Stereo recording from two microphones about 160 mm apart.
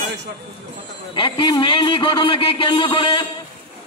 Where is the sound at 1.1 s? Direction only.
30° left (ahead or behind).